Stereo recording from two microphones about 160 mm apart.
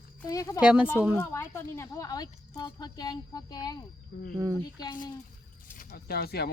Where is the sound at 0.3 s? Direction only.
20° left (ahead or behind).